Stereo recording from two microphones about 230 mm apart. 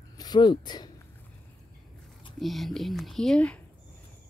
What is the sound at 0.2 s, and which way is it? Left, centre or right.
Speech, centre.